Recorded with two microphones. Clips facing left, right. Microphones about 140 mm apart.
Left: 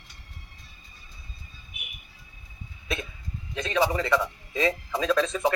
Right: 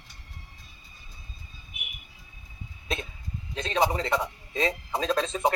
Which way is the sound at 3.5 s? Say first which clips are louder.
Left 1 dB; 25° right (ahead or behind).